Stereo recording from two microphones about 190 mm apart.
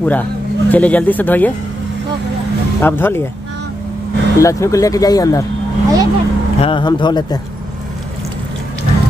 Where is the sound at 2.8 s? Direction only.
10° left (ahead or behind).